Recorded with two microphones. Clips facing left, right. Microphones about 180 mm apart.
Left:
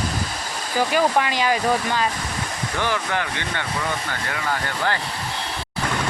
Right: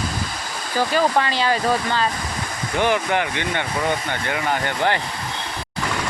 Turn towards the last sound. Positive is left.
turn(degrees=-25)  # may be behind; listen again after turning